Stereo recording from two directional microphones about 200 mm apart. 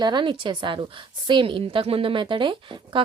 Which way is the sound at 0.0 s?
25° right (ahead or behind).